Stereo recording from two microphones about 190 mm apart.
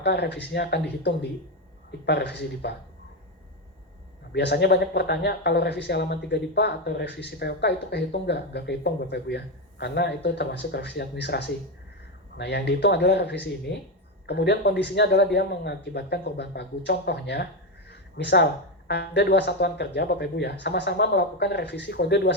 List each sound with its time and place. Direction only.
0.0 s speech: 60° left (ahead or behind)
1.9 s speech: 60° left (ahead or behind)
4.3 s speech: 60° left (ahead or behind)